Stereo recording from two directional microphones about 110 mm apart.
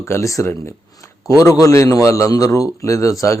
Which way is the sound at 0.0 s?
25° left (ahead or behind).